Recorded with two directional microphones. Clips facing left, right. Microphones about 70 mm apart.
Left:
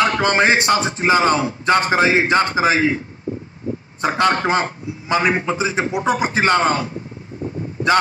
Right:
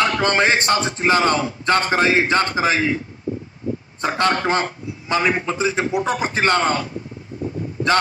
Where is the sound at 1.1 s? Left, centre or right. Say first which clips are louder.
Left 2 dB; centre.